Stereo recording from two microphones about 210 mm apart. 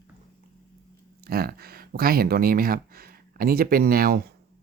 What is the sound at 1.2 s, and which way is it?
Speech, 45° right (ahead or behind).